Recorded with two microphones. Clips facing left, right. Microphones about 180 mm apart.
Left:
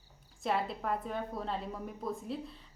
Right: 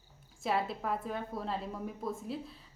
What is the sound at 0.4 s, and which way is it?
A woman's voice, centre (ahead or behind).